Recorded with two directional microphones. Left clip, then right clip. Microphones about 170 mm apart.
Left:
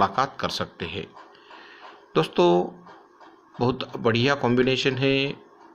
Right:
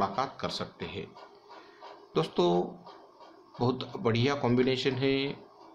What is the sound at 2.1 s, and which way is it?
Speech, 20° left (ahead or behind).